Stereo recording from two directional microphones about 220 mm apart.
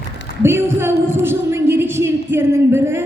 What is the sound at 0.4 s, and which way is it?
A man's voice, 10° right (ahead or behind).